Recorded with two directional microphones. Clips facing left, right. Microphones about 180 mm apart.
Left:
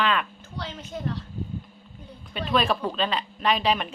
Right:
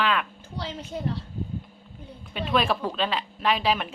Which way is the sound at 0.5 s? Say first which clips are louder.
Right 2 dB; 30° right (ahead or behind).